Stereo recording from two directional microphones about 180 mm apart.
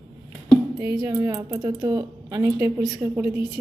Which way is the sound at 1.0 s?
20° right (ahead or behind).